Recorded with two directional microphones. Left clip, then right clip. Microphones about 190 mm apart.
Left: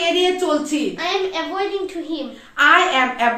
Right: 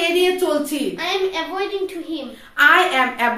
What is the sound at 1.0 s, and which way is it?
A child's voice, 10° left (ahead or behind).